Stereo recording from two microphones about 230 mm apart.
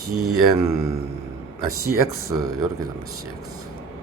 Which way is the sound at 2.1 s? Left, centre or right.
Centre.